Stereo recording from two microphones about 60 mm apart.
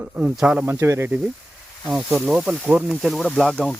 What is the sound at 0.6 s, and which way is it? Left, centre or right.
Speech, right.